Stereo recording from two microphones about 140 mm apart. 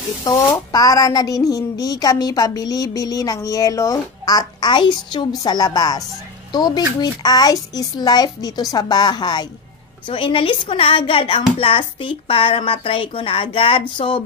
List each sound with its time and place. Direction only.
0.7 s a woman's voice: 30° left (ahead or behind)